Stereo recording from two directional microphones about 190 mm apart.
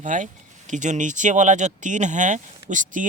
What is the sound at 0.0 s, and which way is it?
A man's voice, 40° right (ahead or behind).